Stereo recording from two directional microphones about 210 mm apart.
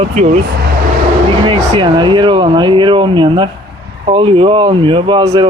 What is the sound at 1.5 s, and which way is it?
Speech, 25° right (ahead or behind).